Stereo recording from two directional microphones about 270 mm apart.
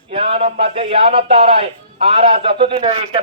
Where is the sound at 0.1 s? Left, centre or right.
Right.